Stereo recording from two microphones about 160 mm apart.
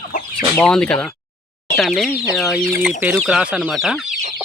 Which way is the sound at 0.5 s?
5° left (ahead or behind).